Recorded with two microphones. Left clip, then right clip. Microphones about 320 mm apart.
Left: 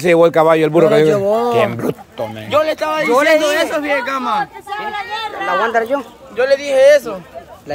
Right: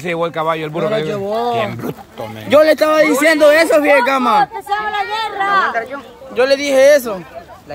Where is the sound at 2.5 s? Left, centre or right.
Right.